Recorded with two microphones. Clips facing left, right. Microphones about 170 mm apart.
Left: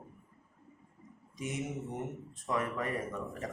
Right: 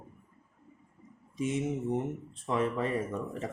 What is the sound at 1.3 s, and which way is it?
Speech, 25° right (ahead or behind).